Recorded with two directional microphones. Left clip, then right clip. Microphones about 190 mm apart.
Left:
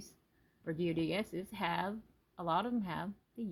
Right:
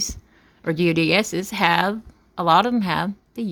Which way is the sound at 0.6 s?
40° right (ahead or behind).